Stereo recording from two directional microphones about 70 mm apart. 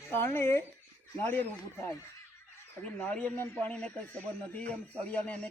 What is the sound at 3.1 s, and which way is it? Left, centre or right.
Speech, centre.